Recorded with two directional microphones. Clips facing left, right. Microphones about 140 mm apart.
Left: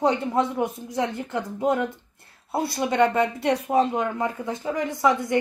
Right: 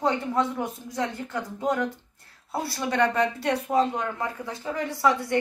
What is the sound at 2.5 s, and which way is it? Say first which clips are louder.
Speech: left 4 dB; 20° left (ahead or behind).